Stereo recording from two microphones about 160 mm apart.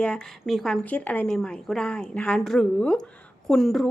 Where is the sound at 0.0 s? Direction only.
5° left (ahead or behind).